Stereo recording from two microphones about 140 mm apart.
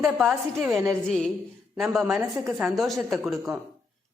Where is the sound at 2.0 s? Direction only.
15° right (ahead or behind).